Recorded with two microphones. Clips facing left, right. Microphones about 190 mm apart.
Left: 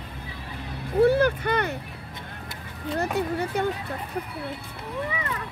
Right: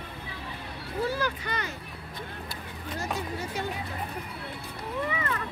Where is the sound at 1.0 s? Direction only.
60° left (ahead or behind).